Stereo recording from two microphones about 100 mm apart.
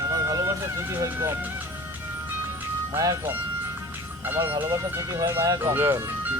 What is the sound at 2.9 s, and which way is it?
Speech, 30° right (ahead or behind).